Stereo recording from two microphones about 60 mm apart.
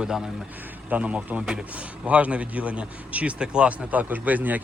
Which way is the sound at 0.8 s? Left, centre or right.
Right.